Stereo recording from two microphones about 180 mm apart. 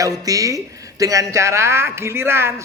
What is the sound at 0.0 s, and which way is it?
Speech, 20° right (ahead or behind).